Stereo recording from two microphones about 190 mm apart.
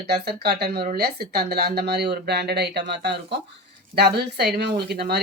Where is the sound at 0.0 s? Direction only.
60° right (ahead or behind).